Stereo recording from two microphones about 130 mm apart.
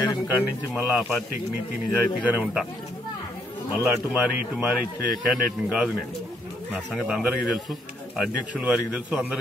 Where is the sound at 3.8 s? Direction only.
10° right (ahead or behind).